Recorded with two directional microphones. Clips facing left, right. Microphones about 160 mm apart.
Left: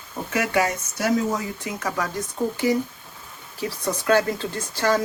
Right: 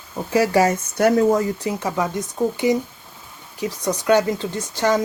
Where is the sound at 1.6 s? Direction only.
25° right (ahead or behind).